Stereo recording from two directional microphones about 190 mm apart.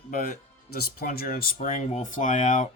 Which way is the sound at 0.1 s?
45° left (ahead or behind).